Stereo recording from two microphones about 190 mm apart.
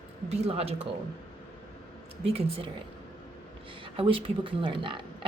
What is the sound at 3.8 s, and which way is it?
Speech, 30° right (ahead or behind).